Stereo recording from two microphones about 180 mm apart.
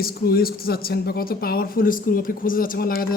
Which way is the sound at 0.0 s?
60° left (ahead or behind).